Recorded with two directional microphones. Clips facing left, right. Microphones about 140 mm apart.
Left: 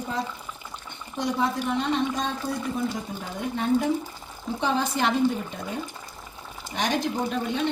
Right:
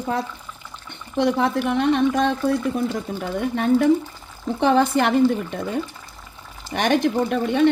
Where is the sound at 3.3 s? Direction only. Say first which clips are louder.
Right 5 dB; 65° right (ahead or behind).